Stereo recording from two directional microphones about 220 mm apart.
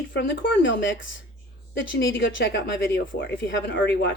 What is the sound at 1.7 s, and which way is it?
Speech, 60° left (ahead or behind).